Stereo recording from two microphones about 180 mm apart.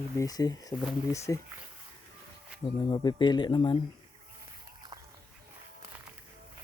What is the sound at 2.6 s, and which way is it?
Speech, 25° left (ahead or behind).